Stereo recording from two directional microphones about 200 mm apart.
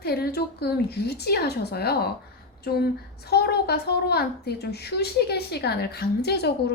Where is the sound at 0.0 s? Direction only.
55° left (ahead or behind).